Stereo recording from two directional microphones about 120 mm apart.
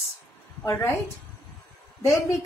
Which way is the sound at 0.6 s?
25° left (ahead or behind).